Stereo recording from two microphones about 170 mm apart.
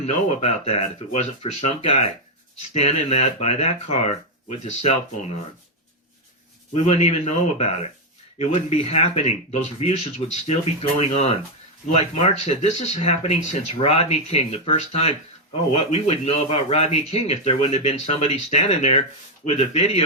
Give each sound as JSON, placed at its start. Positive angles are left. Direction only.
{"t": 0.0, "sound": "speech", "side_deg": 40}
{"t": 6.7, "sound": "speech", "side_deg": 40}